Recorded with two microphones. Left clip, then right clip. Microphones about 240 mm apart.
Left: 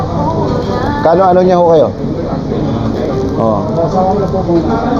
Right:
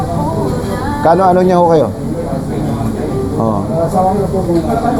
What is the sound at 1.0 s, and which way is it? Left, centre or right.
Speech, right.